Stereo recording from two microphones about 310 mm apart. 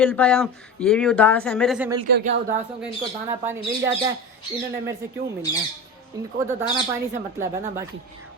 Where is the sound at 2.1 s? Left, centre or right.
Right.